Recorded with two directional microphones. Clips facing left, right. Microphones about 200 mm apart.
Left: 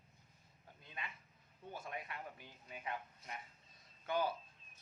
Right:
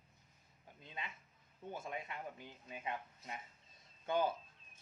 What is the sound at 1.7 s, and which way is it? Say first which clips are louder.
Speech: right 2 dB; 25° right (ahead or behind).